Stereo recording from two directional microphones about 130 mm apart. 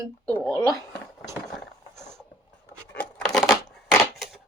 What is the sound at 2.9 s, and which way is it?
Scissors, 10° left (ahead or behind).